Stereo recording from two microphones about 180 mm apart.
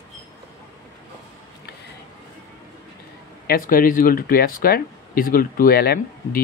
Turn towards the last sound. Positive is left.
turn(degrees=55)  # may be behind; listen again after turning